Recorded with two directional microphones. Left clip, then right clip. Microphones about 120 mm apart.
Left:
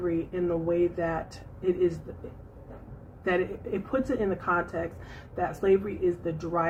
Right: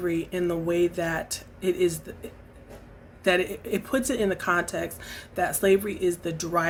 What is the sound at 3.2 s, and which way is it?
A woman's voice, 35° right (ahead or behind).